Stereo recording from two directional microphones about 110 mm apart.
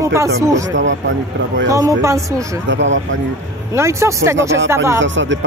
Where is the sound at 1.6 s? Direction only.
30° right (ahead or behind).